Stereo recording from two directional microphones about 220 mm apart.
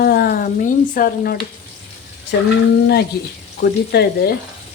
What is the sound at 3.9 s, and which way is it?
Speech, 45° left (ahead or behind).